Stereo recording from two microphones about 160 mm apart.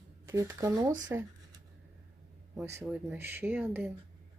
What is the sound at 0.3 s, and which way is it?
Speech, 15° right (ahead or behind).